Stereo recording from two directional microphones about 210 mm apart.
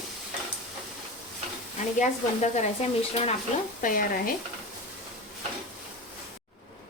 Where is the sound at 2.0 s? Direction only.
35° left (ahead or behind).